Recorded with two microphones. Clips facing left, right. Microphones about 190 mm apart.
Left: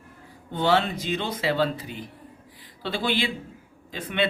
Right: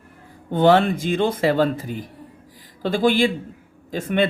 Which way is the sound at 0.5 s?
50° right (ahead or behind).